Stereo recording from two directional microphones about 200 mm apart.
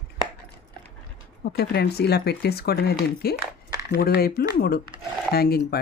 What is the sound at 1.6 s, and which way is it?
Speech, 55° left (ahead or behind).